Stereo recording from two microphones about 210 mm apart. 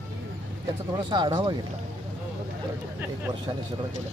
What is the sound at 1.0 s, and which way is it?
Speech, 20° right (ahead or behind).